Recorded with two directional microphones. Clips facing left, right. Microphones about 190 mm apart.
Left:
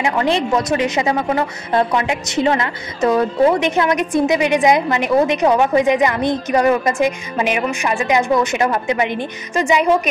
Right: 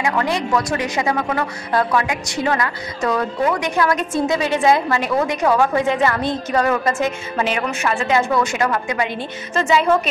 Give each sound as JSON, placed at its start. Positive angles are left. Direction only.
{"t": 0.0, "sound": "a woman's voice", "side_deg": 25}